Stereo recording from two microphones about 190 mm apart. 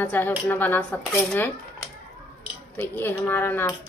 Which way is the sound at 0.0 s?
10° left (ahead or behind).